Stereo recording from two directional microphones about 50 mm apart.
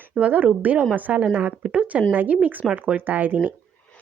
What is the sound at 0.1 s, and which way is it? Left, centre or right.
Speech, centre.